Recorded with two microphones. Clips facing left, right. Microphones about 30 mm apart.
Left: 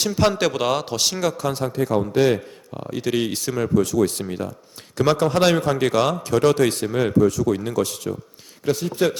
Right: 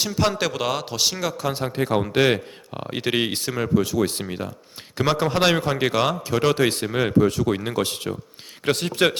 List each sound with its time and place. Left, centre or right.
0.0 s speech: centre
1.7 s speech: right
7.3 s speech: right
8.6 s speech: right